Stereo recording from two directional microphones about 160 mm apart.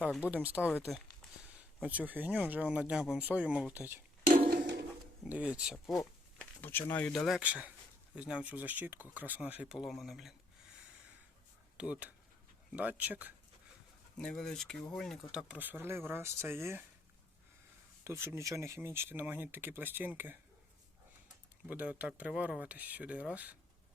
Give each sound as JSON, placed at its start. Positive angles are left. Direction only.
{"t": 0.0, "sound": "speech", "side_deg": -10}
{"t": 4.4, "sound": "a sound", "side_deg": -80}
{"t": 5.2, "sound": "speech", "side_deg": -10}
{"t": 6.6, "sound": "speech", "side_deg": 10}
{"t": 11.8, "sound": "speech", "side_deg": -10}
{"t": 14.2, "sound": "speech", "side_deg": 5}
{"t": 18.0, "sound": "speech", "side_deg": -15}
{"t": 21.7, "sound": "speech", "side_deg": -10}